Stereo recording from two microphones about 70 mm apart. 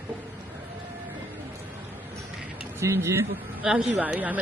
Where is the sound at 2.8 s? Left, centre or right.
Right.